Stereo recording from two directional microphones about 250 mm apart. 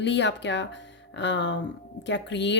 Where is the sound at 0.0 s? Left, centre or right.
Left.